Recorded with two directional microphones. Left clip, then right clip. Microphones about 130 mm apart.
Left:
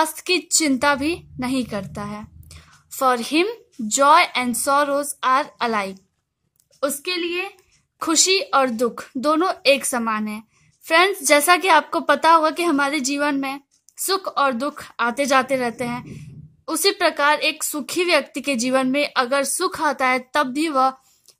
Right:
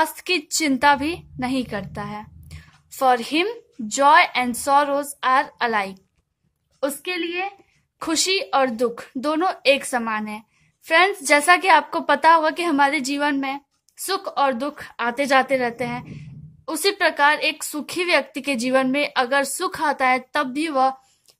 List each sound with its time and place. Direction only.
0.0 s a woman's voice: 35° left (ahead or behind)